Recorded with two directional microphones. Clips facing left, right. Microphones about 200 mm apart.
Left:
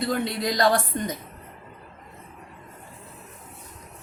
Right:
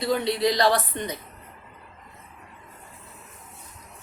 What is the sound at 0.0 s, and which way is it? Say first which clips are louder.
A woman's voice: right 3 dB; 50° left (ahead or behind).